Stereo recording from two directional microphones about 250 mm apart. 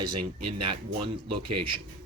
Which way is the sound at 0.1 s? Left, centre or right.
Right.